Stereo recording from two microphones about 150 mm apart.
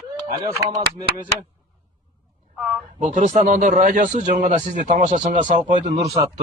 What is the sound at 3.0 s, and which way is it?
Speech, 55° right (ahead or behind).